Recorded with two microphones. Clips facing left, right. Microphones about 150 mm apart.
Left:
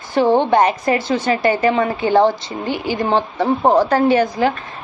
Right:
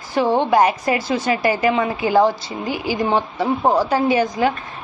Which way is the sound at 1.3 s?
30° left (ahead or behind).